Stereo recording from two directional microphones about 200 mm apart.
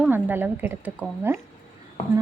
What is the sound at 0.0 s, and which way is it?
A woman's voice, 10° right (ahead or behind).